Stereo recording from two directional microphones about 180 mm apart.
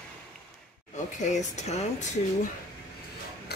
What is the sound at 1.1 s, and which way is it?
Speech, 40° left (ahead or behind).